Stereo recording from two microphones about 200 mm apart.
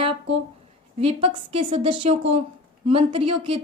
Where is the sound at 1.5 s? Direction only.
25° right (ahead or behind).